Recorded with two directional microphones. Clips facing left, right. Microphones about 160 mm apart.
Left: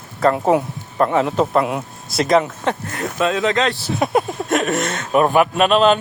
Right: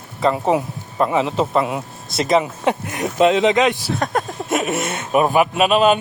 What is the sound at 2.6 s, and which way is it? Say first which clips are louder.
Speech: right 2 dB; 15° right (ahead or behind).